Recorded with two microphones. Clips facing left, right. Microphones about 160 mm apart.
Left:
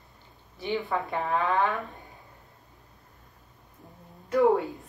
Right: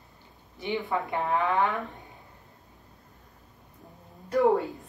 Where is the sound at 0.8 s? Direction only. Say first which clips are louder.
Right 1 dB; 20° right (ahead or behind).